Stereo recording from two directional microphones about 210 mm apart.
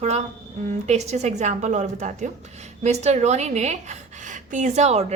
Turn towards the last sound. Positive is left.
turn(degrees=-30)  # may be behind; listen again after turning